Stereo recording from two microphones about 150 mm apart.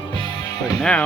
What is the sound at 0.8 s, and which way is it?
Speech, 5° left (ahead or behind).